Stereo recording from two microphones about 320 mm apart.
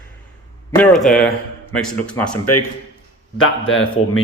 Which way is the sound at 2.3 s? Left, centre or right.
Left.